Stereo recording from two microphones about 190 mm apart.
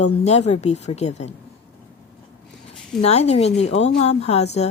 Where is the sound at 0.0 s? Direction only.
35° left (ahead or behind).